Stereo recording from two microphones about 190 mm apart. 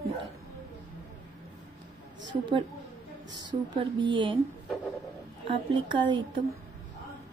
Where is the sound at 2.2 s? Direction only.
25° right (ahead or behind).